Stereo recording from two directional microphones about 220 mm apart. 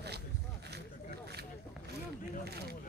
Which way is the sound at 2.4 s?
45° right (ahead or behind).